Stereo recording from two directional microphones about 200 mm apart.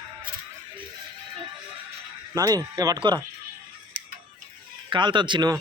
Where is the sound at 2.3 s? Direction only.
15° right (ahead or behind).